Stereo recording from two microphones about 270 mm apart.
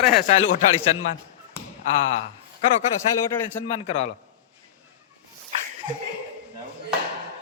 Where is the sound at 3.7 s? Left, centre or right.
Left.